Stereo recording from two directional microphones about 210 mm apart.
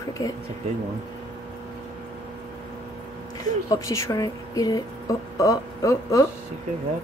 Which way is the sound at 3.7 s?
15° left (ahead or behind).